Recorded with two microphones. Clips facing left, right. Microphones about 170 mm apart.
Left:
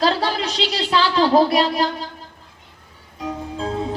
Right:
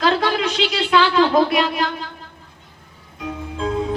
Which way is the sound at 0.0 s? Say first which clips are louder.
Right 1 dB; 35° left (ahead or behind).